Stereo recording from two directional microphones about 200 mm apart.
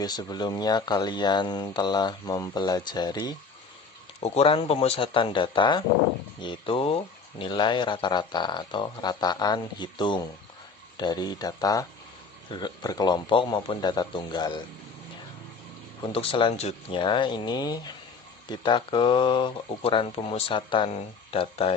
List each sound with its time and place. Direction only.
0.0 s speech: 20° left (ahead or behind)
16.1 s speech: 25° left (ahead or behind)